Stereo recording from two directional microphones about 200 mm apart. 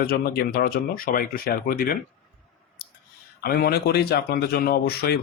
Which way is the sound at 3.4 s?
50° left (ahead or behind).